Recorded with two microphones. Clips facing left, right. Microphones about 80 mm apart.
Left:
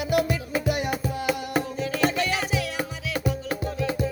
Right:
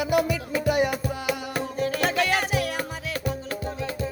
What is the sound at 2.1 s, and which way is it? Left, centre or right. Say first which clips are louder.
Music: right 3 dB; right.